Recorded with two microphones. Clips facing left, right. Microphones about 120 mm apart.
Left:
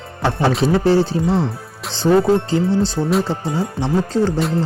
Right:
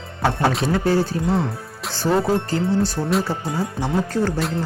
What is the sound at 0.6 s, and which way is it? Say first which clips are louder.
Speech: left 8 dB; 30° left (ahead or behind).